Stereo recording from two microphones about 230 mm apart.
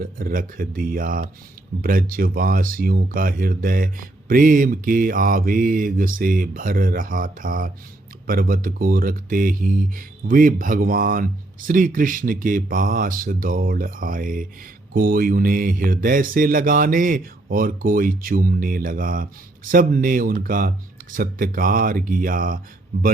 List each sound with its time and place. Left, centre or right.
0.0 s speech: right